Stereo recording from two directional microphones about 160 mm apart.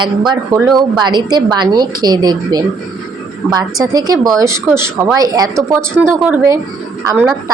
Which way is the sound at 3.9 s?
20° right (ahead or behind).